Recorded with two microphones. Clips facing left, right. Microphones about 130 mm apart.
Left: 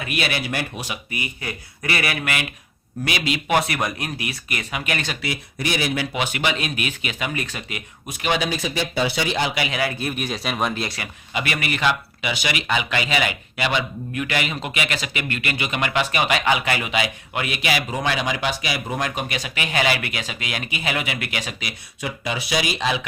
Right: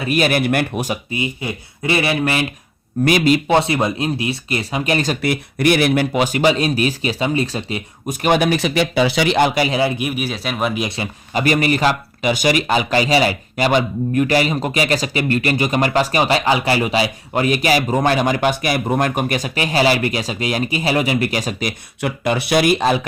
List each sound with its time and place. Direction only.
0.0 s speech: 40° right (ahead or behind)
1.1 s speech: 25° right (ahead or behind)
3.0 s speech: 45° right (ahead or behind)
3.5 s speech: 25° right (ahead or behind)
5.2 s speech: 60° right (ahead or behind)
6.1 s speech: 40° right (ahead or behind); by 9.5 s 75° right (ahead or behind)
9.6 s speech: 30° right (ahead or behind)
10.0 s speech: 5° right (ahead or behind)
10.8 s speech: 25° right (ahead or behind)
11.3 s speech: 40° right (ahead or behind)